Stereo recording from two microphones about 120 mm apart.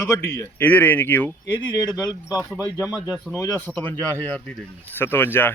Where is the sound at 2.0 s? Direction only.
30° left (ahead or behind).